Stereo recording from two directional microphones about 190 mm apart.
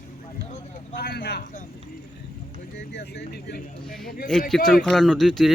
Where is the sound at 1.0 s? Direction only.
60° left (ahead or behind).